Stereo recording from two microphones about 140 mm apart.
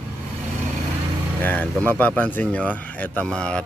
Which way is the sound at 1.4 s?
10° left (ahead or behind).